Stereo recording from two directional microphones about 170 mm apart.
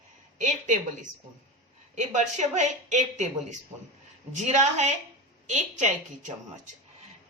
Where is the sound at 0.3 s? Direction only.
45° right (ahead or behind).